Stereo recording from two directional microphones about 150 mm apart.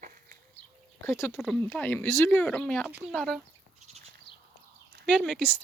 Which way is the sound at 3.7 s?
50° right (ahead or behind).